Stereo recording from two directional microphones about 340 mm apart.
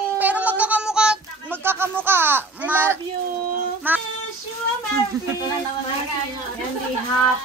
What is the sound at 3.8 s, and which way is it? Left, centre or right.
Child singing, centre.